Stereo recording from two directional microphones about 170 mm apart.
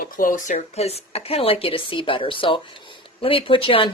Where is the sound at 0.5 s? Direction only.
35° left (ahead or behind).